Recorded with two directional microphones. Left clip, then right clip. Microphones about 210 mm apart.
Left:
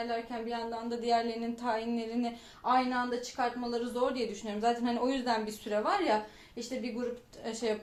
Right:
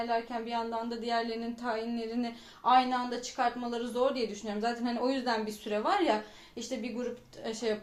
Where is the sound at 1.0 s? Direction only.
Centre (ahead or behind).